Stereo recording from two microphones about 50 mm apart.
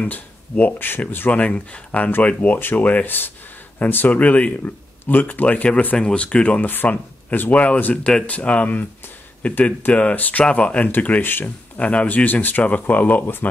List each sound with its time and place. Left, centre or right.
0.0 s speech: left
1.3 s speech: left
6.6 s speech: left
11.8 s speech: left
12.3 s speech: left